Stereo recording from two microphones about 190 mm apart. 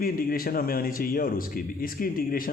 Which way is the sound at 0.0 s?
50° left (ahead or behind).